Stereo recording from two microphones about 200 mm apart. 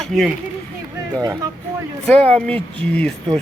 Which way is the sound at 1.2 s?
20° right (ahead or behind).